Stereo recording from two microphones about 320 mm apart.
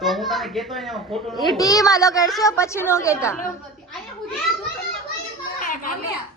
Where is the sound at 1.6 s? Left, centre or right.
Centre.